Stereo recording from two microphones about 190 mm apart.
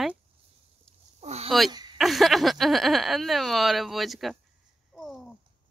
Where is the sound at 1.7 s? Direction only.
20° right (ahead or behind).